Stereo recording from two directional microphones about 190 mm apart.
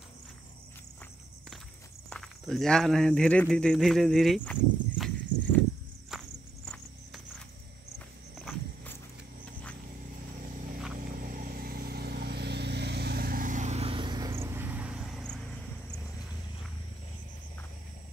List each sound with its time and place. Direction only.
2.0 s speech: 5° left (ahead or behind)
6.0 s walk: centre (ahead or behind)
11.0 s vehicle: 45° right (ahead or behind); by 15.4 s centre (ahead or behind)